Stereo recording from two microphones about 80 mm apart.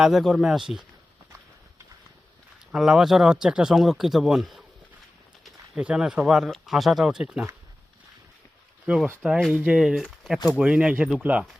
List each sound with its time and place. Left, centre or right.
0.0 s speech: centre
2.7 s speech: centre
5.7 s speech: centre
8.9 s speech: right
9.5 s speech: centre
10.6 s speech: centre